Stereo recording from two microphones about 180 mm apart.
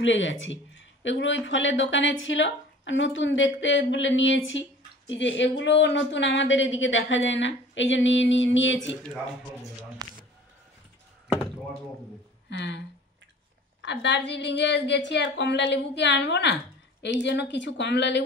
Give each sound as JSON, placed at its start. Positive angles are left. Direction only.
{"t": 0.0, "sound": "speech", "side_deg": 90}
{"t": 10.0, "sound": "speech", "side_deg": -20}
{"t": 12.4, "sound": "a woman's voice", "side_deg": 75}